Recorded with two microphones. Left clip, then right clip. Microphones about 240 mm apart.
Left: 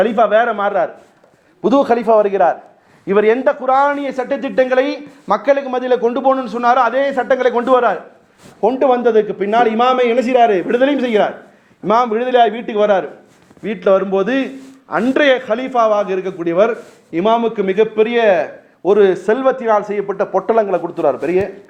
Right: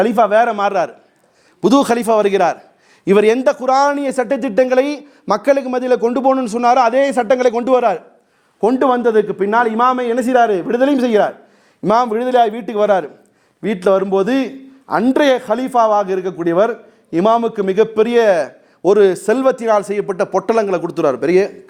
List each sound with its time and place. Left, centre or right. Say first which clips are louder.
0.0 s a man's voice: even; right
8.6 s a man's voice: left 1 dB; right